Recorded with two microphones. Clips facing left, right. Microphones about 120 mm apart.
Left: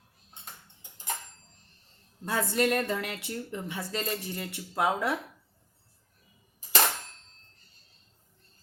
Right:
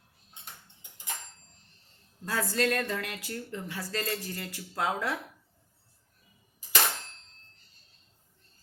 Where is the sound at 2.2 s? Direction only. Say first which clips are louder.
Left 2 dB; 20° left (ahead or behind).